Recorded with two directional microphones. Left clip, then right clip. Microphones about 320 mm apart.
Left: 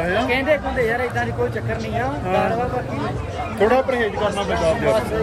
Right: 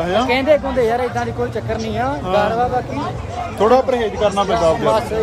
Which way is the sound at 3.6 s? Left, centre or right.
Centre.